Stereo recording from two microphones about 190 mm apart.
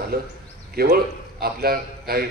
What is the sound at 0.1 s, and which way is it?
A man's voice, 55° right (ahead or behind).